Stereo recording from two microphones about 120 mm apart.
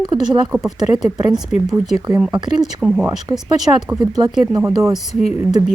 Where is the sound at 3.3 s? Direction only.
25° right (ahead or behind).